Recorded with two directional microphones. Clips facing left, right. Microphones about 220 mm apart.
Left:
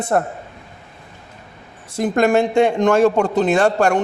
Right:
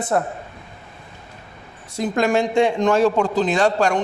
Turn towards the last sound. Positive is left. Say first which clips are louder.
# left 3 dB
turn(degrees=60)  # may be behind; listen again after turning